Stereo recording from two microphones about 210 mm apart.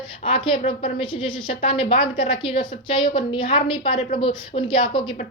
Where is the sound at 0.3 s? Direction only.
25° left (ahead or behind).